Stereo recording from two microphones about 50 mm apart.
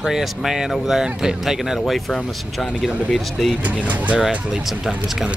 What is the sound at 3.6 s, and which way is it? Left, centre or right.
Speech, right.